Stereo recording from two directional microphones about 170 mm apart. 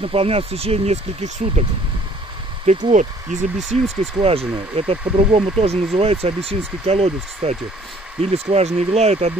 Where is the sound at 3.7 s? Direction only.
35° right (ahead or behind).